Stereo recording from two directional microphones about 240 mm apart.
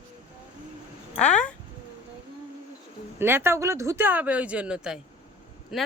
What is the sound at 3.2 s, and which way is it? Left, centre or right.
Speech, centre.